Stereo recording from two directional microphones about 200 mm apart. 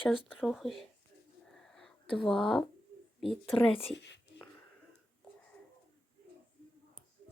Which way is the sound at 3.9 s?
60° left (ahead or behind).